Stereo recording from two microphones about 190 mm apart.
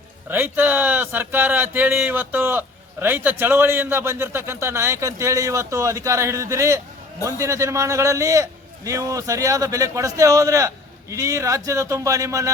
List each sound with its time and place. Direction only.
0.3 s speech: 10° right (ahead or behind)